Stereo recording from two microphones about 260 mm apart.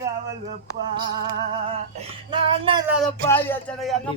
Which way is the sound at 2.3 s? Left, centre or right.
Centre.